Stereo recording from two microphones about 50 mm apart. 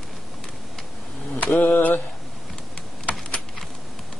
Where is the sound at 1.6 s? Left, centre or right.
Left.